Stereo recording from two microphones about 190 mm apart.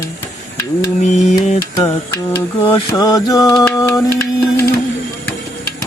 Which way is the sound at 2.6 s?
20° left (ahead or behind).